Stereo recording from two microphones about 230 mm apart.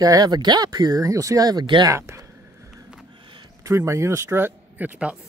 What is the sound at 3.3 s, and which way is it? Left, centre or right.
Speech, centre.